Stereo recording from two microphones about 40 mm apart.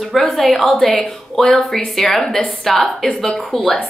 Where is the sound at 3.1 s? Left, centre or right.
Left.